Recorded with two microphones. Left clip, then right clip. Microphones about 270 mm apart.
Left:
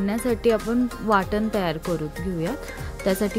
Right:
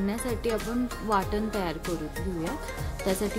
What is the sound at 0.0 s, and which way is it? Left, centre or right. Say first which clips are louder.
Speech: left 8 dB; left.